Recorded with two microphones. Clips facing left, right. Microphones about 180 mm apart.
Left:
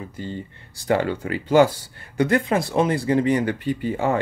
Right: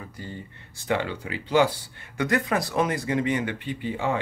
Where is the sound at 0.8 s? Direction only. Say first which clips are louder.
Left 6 dB; 45° left (ahead or behind).